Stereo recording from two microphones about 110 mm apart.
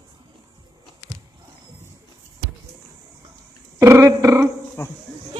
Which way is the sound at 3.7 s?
25° right (ahead or behind).